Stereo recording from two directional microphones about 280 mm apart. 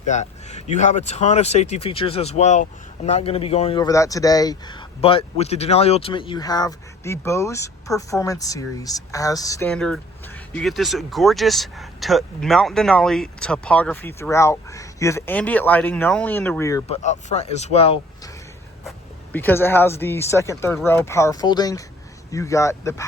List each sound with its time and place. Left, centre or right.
0.0 s speech: left
17.0 s speech: left
18.9 s speech: centre